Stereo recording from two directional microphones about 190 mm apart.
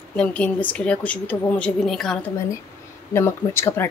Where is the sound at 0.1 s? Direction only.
5° left (ahead or behind).